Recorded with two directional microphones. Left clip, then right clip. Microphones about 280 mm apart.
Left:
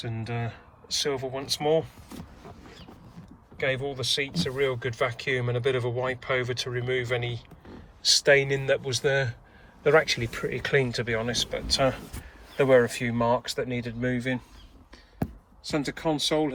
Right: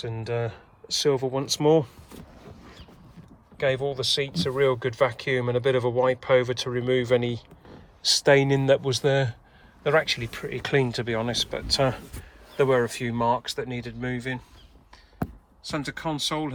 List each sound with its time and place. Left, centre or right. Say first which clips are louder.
0.3 s speech: right 6 dB; centre
3.6 s speech: right 3 dB; centre
15.6 s speech: left 2 dB; centre